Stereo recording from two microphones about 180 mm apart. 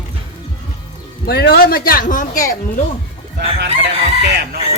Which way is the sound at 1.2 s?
60° left (ahead or behind).